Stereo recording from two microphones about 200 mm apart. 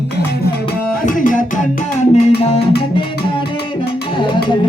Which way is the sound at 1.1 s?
40° left (ahead or behind).